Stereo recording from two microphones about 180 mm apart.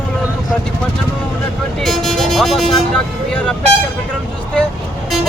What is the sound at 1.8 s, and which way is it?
Speech, centre (ahead or behind).